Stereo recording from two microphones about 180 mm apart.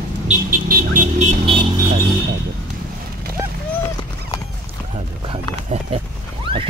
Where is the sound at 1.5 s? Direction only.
30° right (ahead or behind).